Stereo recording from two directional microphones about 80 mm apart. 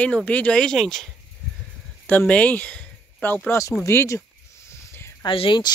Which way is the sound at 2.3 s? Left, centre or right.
Centre.